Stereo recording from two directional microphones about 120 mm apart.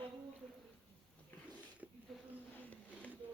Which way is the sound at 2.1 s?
Centre (ahead or behind).